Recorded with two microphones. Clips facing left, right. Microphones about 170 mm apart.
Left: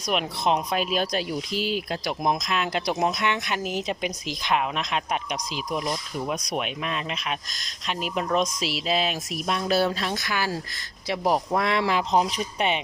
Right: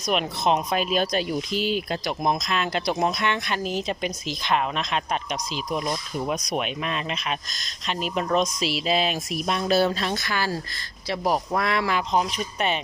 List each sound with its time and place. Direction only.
0.0 s speech: 5° left (ahead or behind); by 12.7 s 25° left (ahead or behind)